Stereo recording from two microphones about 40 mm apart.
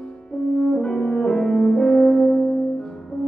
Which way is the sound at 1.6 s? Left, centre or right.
Left.